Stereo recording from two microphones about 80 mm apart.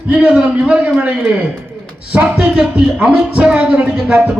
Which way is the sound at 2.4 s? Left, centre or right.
Centre.